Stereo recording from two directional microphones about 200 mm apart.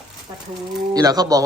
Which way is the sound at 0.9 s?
20° right (ahead or behind).